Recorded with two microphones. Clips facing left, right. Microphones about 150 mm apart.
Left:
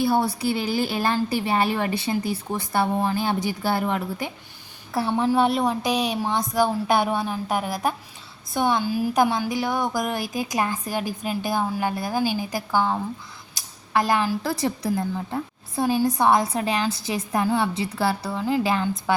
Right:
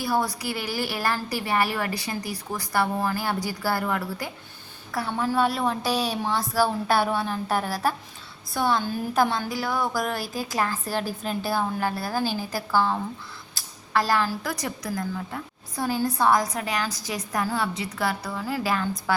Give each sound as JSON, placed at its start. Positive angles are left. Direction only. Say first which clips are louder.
{"t": 0.0, "sound": "a woman's voice", "louder": "left 4 dB", "side_deg": 25}
{"t": 8.8, "sound": "a woman's voice", "louder": "left 3 dB", "side_deg": 10}
{"t": 13.5, "sound": "a sound", "louder": "left 2 dB", "side_deg": 20}
{"t": 14.4, "sound": "a woman's voice", "louder": "left 6 dB", "side_deg": 30}